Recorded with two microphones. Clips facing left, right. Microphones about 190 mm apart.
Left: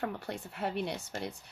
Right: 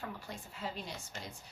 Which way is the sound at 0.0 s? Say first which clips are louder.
Left 8 dB; 65° left (ahead or behind).